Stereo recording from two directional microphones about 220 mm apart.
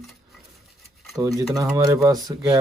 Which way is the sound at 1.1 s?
15° right (ahead or behind).